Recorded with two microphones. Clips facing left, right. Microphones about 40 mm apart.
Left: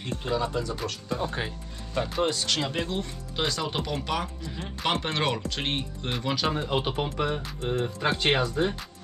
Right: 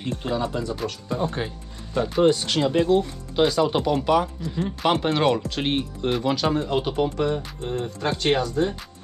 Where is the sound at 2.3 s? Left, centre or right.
Centre.